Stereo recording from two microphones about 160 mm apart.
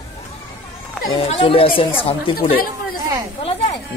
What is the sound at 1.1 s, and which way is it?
Speech, 35° left (ahead or behind).